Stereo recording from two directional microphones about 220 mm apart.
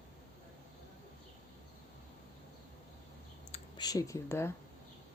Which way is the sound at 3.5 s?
30° left (ahead or behind).